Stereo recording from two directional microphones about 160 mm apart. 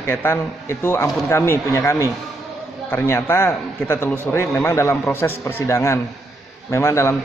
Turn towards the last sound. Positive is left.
turn(degrees=15)  # may be behind; listen again after turning